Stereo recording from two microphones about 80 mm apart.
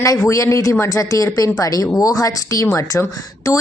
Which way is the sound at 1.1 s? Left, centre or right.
Left.